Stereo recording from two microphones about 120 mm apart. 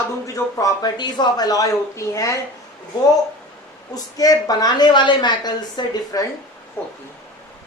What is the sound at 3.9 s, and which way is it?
A woman's voice, 30° left (ahead or behind).